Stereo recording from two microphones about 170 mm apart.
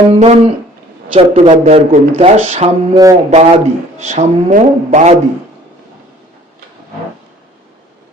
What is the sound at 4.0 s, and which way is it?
Speech, 40° right (ahead or behind).